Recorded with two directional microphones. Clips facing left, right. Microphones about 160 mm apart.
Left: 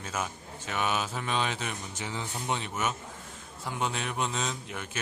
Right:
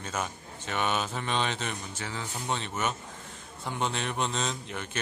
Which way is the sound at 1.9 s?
15° left (ahead or behind).